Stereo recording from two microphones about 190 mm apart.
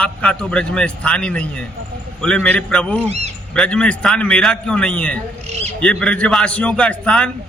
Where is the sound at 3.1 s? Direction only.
35° right (ahead or behind).